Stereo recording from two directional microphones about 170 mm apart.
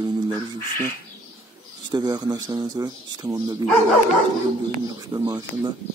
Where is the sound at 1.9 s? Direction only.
25° right (ahead or behind).